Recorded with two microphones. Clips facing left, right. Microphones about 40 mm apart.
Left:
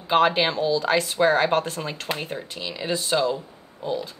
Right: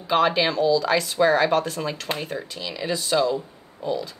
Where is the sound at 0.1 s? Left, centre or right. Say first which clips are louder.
Even; left.